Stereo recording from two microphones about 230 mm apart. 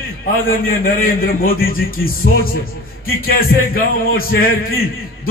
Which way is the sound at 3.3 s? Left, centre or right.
Left.